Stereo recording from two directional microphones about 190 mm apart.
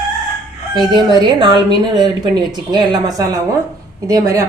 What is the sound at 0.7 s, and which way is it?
Speech, 20° right (ahead or behind).